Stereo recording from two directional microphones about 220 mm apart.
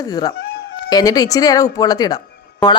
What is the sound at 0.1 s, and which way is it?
A woman's voice, 15° left (ahead or behind).